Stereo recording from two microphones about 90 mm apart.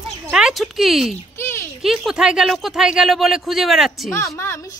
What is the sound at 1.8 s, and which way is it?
Speech, 5° right (ahead or behind).